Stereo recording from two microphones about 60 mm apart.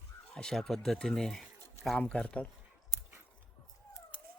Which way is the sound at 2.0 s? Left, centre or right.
Centre.